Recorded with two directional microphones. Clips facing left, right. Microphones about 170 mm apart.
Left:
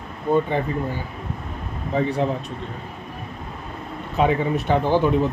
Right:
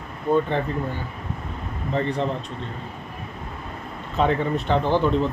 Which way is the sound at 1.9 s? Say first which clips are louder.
Left 2 dB; 10° left (ahead or behind).